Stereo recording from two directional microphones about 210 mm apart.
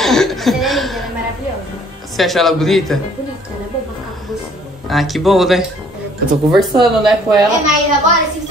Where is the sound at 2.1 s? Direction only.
Centre (ahead or behind).